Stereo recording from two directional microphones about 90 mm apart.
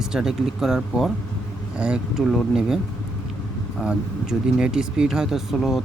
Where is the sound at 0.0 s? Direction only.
5° right (ahead or behind).